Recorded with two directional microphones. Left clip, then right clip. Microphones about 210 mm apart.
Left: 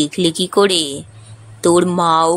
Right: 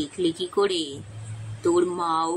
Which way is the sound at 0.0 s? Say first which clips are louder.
Left 9 dB; 55° left (ahead or behind).